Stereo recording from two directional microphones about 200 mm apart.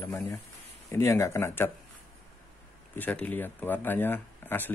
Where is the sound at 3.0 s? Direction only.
10° left (ahead or behind).